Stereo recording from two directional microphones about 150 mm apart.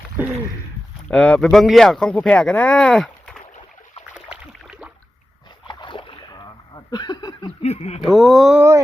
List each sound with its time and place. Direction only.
1.0 s speech: 5° left (ahead or behind)
4.1 s a sound: 5° right (ahead or behind)
5.6 s boat: 30° left (ahead or behind)
7.6 s speech: 45° left (ahead or behind)
8.0 s speech: centre (ahead or behind)